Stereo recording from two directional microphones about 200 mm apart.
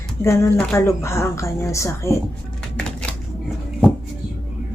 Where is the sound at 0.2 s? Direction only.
15° left (ahead or behind).